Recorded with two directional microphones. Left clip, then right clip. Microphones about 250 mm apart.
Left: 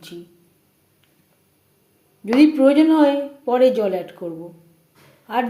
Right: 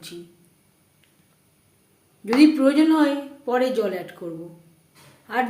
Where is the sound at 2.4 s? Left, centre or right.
Centre.